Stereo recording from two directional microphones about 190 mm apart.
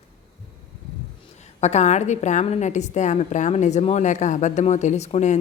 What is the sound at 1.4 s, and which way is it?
A woman's voice, 35° left (ahead or behind).